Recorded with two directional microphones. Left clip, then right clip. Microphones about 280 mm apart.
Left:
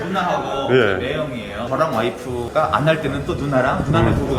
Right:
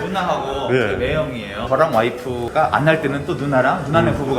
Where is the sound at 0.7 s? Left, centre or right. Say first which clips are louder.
Left 3 dB; centre.